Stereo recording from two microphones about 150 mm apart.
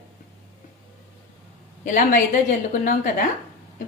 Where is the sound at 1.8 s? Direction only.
55° left (ahead or behind).